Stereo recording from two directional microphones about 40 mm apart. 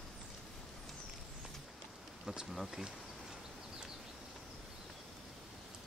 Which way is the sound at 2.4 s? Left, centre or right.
Centre.